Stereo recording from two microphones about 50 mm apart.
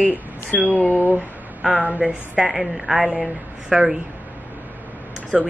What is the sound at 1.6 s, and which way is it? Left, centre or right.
Speech, right.